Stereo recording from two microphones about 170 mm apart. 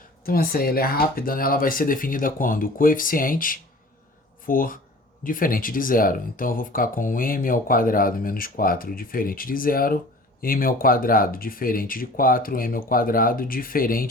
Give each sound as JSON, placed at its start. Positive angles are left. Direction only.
{"t": 0.3, "sound": "speech", "side_deg": 60}